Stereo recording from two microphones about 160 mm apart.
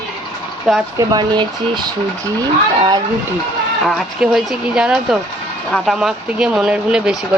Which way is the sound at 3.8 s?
5° right (ahead or behind).